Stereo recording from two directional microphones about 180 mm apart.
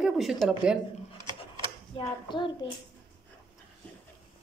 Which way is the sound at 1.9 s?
25° left (ahead or behind).